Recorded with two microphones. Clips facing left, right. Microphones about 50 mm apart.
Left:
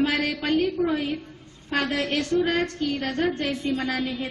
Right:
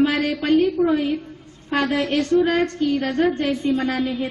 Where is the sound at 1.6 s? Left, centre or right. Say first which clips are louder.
Right 4 dB; centre.